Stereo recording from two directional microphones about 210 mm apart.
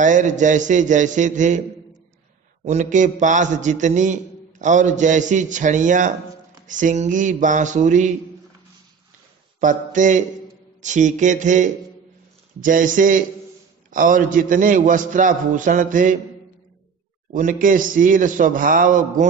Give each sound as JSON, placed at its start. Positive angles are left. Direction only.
{"t": 0.0, "sound": "a man's voice", "side_deg": -35}
{"t": 2.6, "sound": "a man's voice", "side_deg": -35}
{"t": 9.6, "sound": "a man's voice", "side_deg": -35}
{"t": 17.3, "sound": "a man's voice", "side_deg": -40}